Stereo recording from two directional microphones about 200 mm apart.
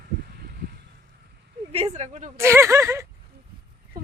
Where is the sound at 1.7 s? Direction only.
30° right (ahead or behind).